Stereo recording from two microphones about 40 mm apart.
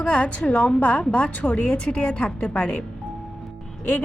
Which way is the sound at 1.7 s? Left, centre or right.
Left.